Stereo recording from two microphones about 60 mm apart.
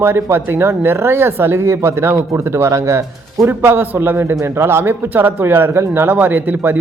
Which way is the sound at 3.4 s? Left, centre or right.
Right.